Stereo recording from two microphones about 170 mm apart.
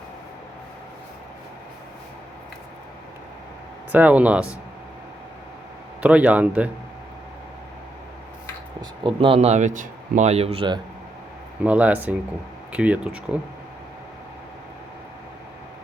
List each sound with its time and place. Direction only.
3.9 s speech: 10° right (ahead or behind)
6.0 s speech: 10° right (ahead or behind)
8.8 s speech: 30° right (ahead or behind)
11.6 s speech: 10° right (ahead or behind)